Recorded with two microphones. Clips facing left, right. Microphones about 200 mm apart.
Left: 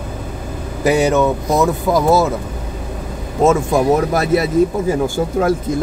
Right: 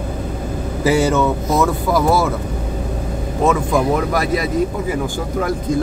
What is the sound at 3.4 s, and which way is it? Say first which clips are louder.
Speech: left 3 dB; 25° left (ahead or behind).